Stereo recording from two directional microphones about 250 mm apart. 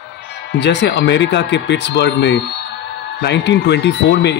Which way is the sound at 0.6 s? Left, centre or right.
Left.